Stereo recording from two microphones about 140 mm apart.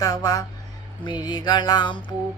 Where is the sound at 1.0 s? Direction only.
30° left (ahead or behind).